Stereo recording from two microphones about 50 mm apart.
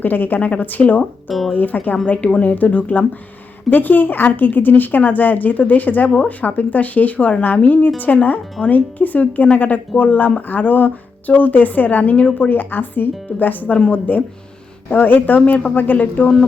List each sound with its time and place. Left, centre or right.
0.0 s speech: left
1.3 s speech: centre
1.5 s speech: left
12.5 s speech: left